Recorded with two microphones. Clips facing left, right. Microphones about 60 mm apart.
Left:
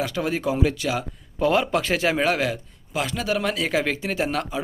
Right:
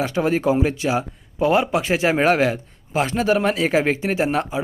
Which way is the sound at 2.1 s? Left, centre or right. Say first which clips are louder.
Right 5 dB; right.